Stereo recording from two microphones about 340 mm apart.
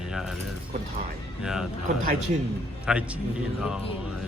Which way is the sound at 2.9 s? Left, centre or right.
Centre.